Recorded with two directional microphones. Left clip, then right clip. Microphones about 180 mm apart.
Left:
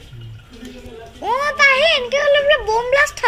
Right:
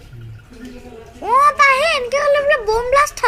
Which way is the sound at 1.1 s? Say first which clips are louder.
Right 4 dB; 15° right (ahead or behind).